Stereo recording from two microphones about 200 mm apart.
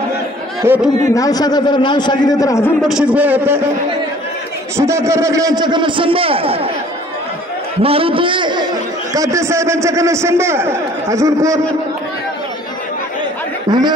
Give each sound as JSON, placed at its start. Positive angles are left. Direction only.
{"t": 0.6, "sound": "a man's voice", "side_deg": -10}
{"t": 1.0, "sound": "a man's voice", "side_deg": 15}
{"t": 2.8, "sound": "a man's voice", "side_deg": -5}
{"t": 4.7, "sound": "a man's voice", "side_deg": -15}
{"t": 7.8, "sound": "a man's voice", "side_deg": -30}
{"t": 13.7, "sound": "speech", "side_deg": -20}